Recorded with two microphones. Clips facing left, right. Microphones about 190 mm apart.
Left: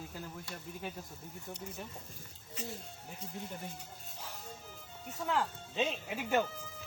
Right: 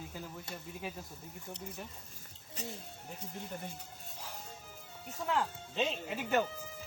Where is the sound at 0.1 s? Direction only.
Centre (ahead or behind).